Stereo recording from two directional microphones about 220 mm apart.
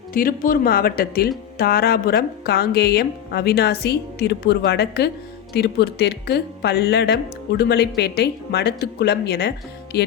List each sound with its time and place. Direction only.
0.1 s speech: 40° left (ahead or behind)